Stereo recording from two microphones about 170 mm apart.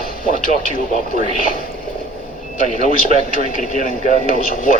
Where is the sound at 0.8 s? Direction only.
55° left (ahead or behind).